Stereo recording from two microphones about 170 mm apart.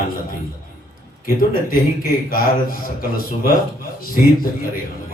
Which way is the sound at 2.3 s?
55° left (ahead or behind).